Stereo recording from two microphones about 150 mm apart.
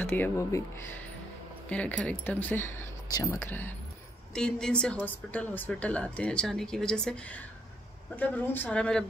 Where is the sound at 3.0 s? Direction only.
20° left (ahead or behind); by 7.1 s 5° left (ahead or behind).